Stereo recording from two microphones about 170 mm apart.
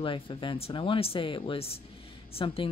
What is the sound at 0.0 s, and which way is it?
Speech, 30° left (ahead or behind).